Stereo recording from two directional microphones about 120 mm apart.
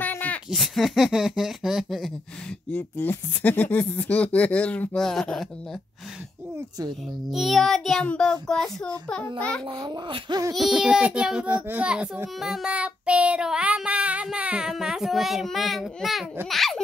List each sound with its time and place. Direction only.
0.0 s a sound: 15° left (ahead or behind)
0.5 s child singing: centre (ahead or behind)
2.7 s speech: 15° left (ahead or behind)
7.2 s child singing: centre (ahead or behind)
9.7 s a child's voice: 45° right (ahead or behind)
10.5 s a child's voice: centre (ahead or behind)
12.4 s child singing: 5° right (ahead or behind)